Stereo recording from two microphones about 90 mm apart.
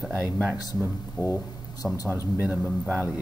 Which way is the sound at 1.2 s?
45° left (ahead or behind).